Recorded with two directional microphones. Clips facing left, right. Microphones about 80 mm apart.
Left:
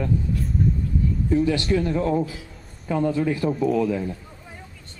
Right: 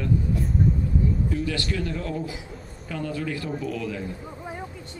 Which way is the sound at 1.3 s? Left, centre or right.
Left.